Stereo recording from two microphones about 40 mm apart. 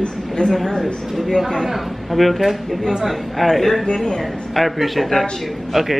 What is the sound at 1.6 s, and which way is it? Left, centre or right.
Speech, centre.